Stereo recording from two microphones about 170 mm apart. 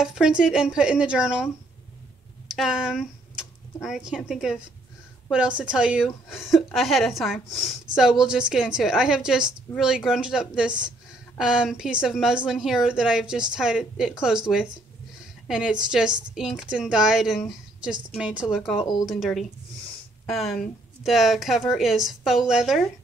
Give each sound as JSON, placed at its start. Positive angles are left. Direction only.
{"t": 0.0, "sound": "a woman's voice", "side_deg": -5}
{"t": 5.6, "sound": "a woman's voice", "side_deg": -5}
{"t": 18.8, "sound": "speech", "side_deg": 25}
{"t": 19.0, "sound": "a woman's voice", "side_deg": 0}